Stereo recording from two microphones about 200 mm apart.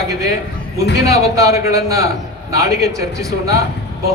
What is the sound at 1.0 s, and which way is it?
A man's voice, 15° right (ahead or behind).